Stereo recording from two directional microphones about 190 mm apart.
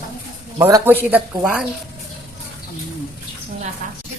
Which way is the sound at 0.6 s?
10° right (ahead or behind).